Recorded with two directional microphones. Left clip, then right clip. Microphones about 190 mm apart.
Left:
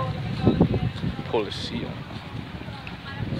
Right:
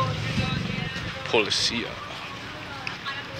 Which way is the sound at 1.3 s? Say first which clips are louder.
Right 5 dB; 15° left (ahead or behind).